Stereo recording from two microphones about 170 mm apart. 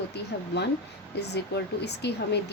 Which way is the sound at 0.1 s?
80° left.